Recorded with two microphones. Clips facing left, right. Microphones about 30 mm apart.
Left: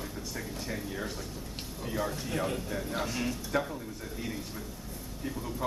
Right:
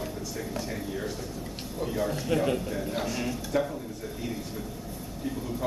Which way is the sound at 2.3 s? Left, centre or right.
Right.